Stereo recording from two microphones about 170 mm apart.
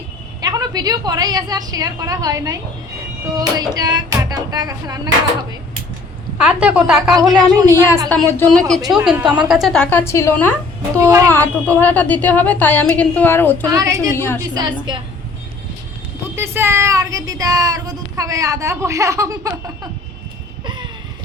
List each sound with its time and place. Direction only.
0.4 s a woman's voice: 25° right (ahead or behind)
6.4 s a woman's voice: 5° right (ahead or behind)
7.1 s a woman's voice: 20° right (ahead or behind)
8.4 s a woman's voice: 5° left (ahead or behind)
9.1 s a woman's voice: 5° right (ahead or behind); by 10.5 s 15° left (ahead or behind)
11.0 s a woman's voice: 15° right (ahead or behind)
11.3 s a woman's voice: 10° left (ahead or behind)
13.7 s a woman's voice: 20° right (ahead or behind)
14.2 s a woman's voice: 15° left (ahead or behind)
14.5 s a woman's voice: 25° right (ahead or behind)
16.3 s speech: 15° right (ahead or behind)